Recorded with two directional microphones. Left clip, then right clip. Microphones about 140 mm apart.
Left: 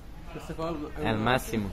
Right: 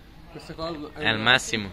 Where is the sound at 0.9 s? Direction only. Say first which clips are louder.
Right 7 dB; centre (ahead or behind).